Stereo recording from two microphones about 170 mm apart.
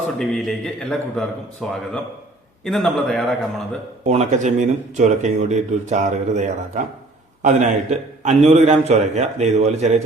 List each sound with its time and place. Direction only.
0.2 s a man's voice: centre (ahead or behind)
4.0 s a man's voice: 40° right (ahead or behind)